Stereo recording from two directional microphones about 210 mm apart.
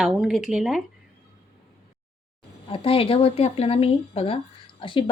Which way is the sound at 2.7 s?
25° left (ahead or behind).